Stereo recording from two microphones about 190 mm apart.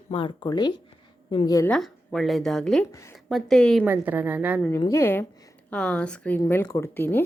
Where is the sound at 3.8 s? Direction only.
10° right (ahead or behind).